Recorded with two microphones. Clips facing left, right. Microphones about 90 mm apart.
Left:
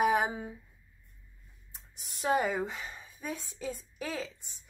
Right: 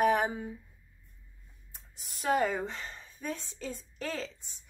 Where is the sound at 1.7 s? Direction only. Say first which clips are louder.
Left 1 dB; 20° left (ahead or behind).